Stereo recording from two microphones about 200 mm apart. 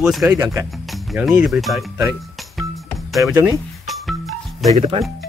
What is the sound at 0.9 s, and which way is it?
Speech, centre (ahead or behind).